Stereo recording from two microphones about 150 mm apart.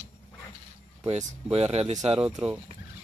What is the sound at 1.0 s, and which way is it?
Speech, 40° right (ahead or behind).